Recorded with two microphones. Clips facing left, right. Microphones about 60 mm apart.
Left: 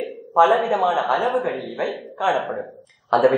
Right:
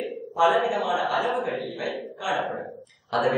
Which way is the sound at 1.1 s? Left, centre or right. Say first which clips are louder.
Left 5 dB; left.